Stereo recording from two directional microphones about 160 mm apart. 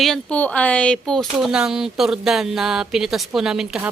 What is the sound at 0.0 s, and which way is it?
Speech, 5° left (ahead or behind).